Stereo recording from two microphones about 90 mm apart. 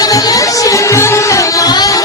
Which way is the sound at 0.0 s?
40° left (ahead or behind).